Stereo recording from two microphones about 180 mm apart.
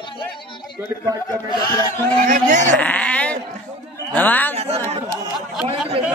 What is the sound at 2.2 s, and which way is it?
Speech, 45° right (ahead or behind).